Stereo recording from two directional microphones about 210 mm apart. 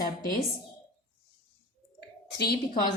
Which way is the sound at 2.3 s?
50° left (ahead or behind).